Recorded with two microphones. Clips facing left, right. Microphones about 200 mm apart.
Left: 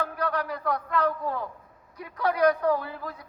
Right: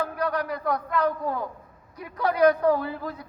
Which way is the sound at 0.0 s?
10° right (ahead or behind).